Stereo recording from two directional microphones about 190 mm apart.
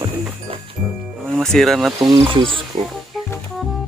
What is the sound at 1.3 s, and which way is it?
Speech, centre (ahead or behind).